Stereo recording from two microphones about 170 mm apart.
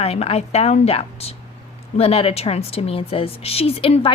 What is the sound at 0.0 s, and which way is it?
A woman's voice, 35° left (ahead or behind).